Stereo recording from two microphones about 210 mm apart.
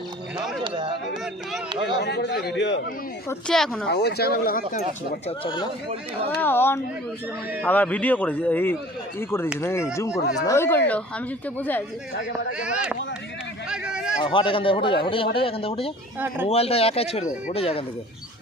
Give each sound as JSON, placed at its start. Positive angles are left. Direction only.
{"t": 0.3, "sound": "a woman's voice", "side_deg": 0}
{"t": 0.6, "sound": "speech", "side_deg": -25}
{"t": 1.8, "sound": "speech", "side_deg": 55}
{"t": 3.2, "sound": "a woman's voice", "side_deg": 5}
{"t": 3.8, "sound": "speech", "side_deg": 50}
{"t": 5.4, "sound": "a man's voice", "side_deg": 20}
{"t": 6.4, "sound": "a man's voice", "side_deg": 10}
{"t": 12.5, "sound": "a woman's voice", "side_deg": -5}
{"t": 13.7, "sound": "a sound", "side_deg": -5}
{"t": 14.2, "sound": "a man's voice", "side_deg": 25}